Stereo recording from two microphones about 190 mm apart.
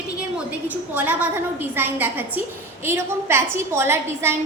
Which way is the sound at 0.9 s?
10° right (ahead or behind).